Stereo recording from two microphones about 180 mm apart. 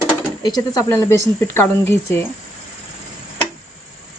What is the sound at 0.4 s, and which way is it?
Speech, 20° left (ahead or behind).